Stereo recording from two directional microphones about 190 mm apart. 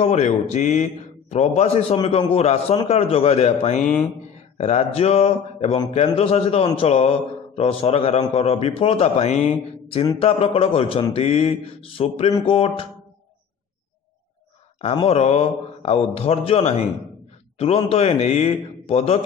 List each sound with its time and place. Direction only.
0.0 s a man's voice: 35° left (ahead or behind)
14.8 s a man's voice: 30° left (ahead or behind)